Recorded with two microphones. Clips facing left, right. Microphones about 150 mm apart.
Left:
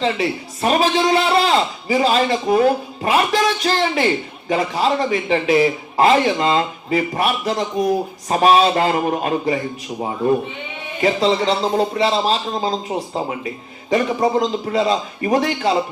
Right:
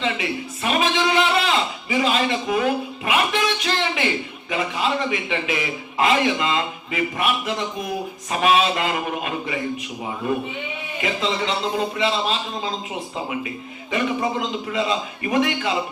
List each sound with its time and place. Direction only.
0.0 s a man's voice: 35° left (ahead or behind)
11.0 s a man's voice: 35° left (ahead or behind)